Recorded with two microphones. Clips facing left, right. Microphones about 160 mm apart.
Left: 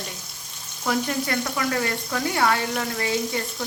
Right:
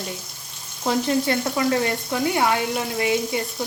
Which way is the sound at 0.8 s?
25° right (ahead or behind).